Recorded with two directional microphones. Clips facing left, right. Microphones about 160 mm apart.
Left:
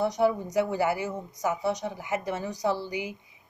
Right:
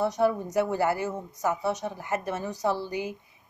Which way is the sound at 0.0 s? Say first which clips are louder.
Even; 15° left (ahead or behind).